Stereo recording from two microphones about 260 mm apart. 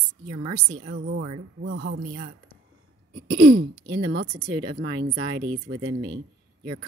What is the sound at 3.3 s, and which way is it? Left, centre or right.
A woman's voice, right.